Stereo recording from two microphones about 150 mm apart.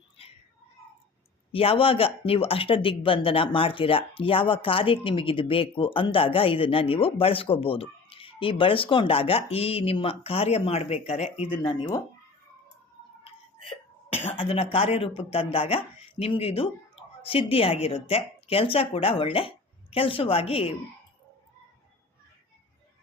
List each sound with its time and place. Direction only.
0.2 s a sound: 40° left (ahead or behind)
1.5 s speech: 40° left (ahead or behind)
11.6 s speech: 25° left (ahead or behind)
14.3 s speech: 40° left (ahead or behind)